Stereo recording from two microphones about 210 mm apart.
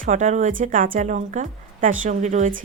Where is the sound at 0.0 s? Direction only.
35° right (ahead or behind).